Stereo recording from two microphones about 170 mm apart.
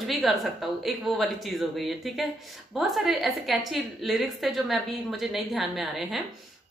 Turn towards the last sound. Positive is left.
turn(degrees=0)  # may be behind; listen again after turning